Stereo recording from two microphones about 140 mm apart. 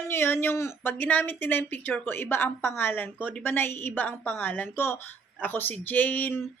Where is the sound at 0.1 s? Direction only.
15° left (ahead or behind).